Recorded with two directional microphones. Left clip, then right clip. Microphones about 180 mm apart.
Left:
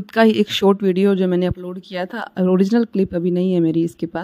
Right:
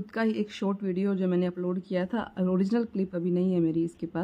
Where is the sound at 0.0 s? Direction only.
45° left (ahead or behind).